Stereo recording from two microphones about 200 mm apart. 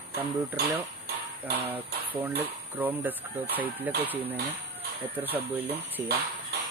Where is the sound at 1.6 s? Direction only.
10° right (ahead or behind).